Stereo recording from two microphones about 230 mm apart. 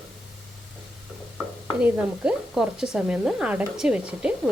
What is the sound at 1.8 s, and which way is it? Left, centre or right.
Speech, centre.